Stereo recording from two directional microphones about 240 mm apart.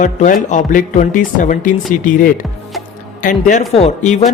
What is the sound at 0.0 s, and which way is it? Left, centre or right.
Speech, left.